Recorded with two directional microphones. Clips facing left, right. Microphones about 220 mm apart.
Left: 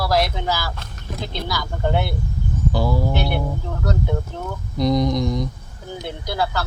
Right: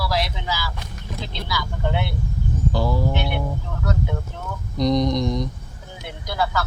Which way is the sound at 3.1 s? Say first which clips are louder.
Left 2 dB; 35° left (ahead or behind).